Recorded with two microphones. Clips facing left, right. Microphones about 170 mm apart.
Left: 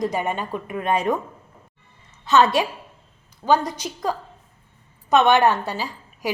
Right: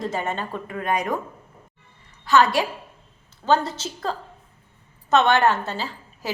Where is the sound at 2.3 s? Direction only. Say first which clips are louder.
Left 1 dB; 20° left (ahead or behind).